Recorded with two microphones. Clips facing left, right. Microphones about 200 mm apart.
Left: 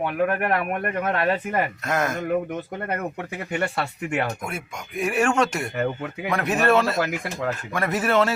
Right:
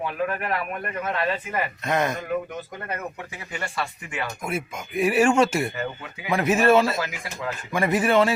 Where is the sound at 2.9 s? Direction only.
55° left (ahead or behind).